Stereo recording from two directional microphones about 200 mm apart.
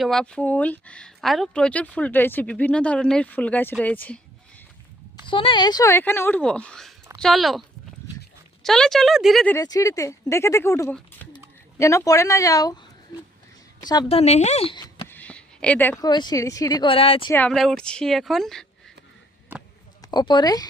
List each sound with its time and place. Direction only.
0.0 s speech: centre (ahead or behind)
5.2 s a woman's voice: 25° left (ahead or behind); by 7.6 s centre (ahead or behind)
8.6 s a woman's voice: centre (ahead or behind)
9.6 s speech: 15° left (ahead or behind)
14.1 s speech: 30° left (ahead or behind)
15.0 s a sound: 10° left (ahead or behind)
16.0 s speech: 20° left (ahead or behind)
17.3 s a woman's voice: 5° left (ahead or behind)
20.0 s speech: 20° left (ahead or behind)